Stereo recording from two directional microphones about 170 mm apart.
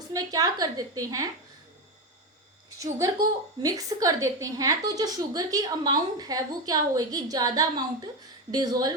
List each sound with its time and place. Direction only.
0.1 s a woman's voice: 20° right (ahead or behind)
2.6 s a woman's voice: 20° right (ahead or behind)